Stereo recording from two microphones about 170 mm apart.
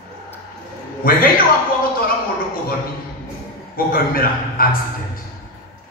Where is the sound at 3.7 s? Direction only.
60° left (ahead or behind).